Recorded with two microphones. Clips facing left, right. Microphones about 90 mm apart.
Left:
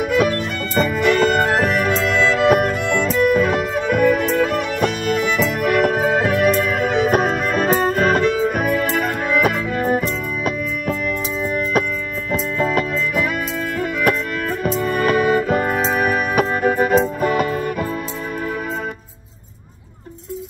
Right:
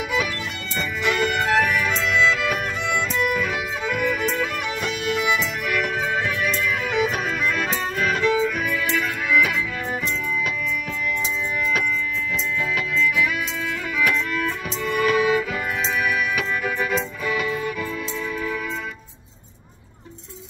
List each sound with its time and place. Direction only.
0.0 s music: 50° left (ahead or behind)
12.3 s music: 45° left (ahead or behind)